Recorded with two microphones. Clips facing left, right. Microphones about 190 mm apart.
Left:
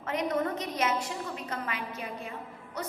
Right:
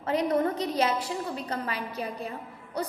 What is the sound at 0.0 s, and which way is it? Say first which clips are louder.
A woman's voice: right 4 dB; 35° right (ahead or behind).